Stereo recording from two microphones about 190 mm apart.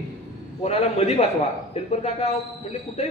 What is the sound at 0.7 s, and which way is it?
A man's voice, 35° left (ahead or behind).